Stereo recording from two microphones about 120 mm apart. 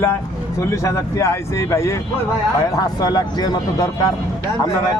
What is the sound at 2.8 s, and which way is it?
Speech, 35° left (ahead or behind).